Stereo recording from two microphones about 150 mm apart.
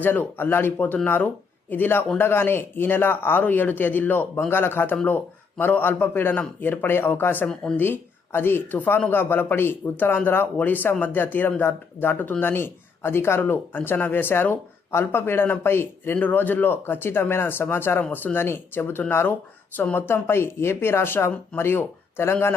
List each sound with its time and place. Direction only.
0.0 s speech: 15° left (ahead or behind)